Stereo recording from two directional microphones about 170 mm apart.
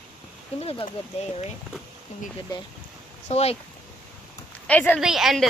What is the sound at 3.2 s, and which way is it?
Speech, 40° left (ahead or behind).